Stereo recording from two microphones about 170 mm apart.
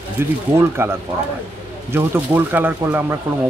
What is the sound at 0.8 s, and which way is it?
Speech, 15° right (ahead or behind).